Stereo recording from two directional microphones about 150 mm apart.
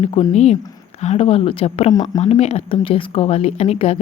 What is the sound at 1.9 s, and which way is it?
Speech, 25° left (ahead or behind).